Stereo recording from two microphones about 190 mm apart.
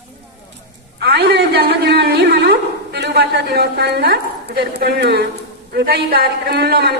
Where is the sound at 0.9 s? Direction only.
60° right (ahead or behind).